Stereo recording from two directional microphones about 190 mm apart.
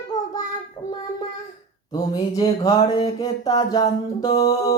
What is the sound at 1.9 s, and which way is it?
Speech, 20° left (ahead or behind).